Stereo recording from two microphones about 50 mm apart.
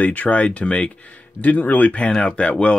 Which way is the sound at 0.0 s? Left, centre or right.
Left.